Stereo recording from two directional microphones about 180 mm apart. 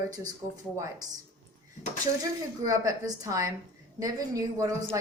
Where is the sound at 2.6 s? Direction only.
20° right (ahead or behind).